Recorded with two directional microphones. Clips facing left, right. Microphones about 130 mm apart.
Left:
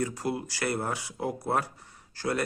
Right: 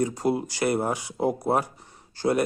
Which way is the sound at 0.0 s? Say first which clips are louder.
Right 6 dB; 20° right (ahead or behind).